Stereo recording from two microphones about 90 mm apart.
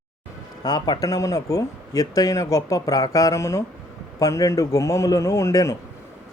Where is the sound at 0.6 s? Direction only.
50° left (ahead or behind).